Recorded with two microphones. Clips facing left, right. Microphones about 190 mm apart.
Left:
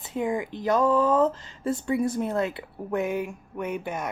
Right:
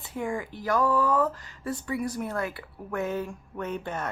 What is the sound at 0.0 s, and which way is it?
Speech, 20° left (ahead or behind).